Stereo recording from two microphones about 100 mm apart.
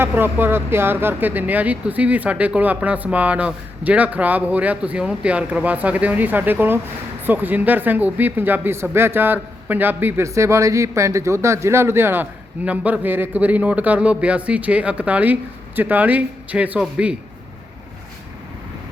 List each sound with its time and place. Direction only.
0.0 s a woman's voice: 20° right (ahead or behind)